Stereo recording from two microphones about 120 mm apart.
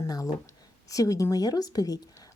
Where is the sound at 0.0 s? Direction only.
30° left (ahead or behind).